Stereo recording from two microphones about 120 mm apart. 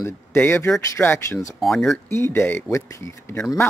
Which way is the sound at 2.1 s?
20° left (ahead or behind).